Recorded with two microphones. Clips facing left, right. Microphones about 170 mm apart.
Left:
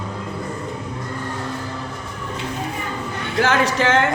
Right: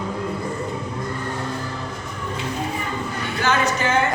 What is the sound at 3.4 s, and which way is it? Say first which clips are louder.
Speech: left 3 dB; 90° left.